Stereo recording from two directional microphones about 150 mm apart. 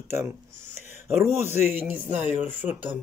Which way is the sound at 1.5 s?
50° left (ahead or behind).